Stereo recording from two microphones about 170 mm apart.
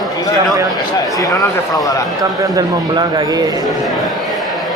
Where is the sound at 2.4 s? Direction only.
25° right (ahead or behind).